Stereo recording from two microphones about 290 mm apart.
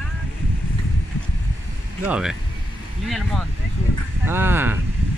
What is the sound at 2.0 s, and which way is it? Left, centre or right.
Speech, centre.